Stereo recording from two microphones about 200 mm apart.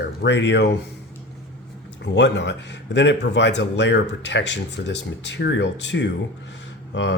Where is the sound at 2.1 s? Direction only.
60° left (ahead or behind).